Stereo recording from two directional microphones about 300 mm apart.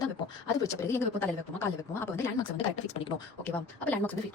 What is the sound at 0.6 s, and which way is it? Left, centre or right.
Speech, centre.